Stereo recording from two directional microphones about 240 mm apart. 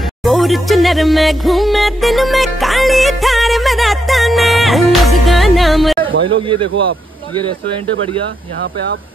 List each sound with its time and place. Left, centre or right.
0.2 s music: centre
6.7 s speech: right